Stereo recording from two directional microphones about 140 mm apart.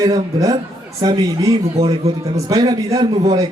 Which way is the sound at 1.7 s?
45° right (ahead or behind).